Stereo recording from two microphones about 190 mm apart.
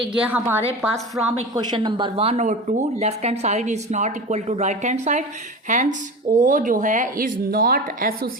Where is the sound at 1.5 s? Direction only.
25° right (ahead or behind).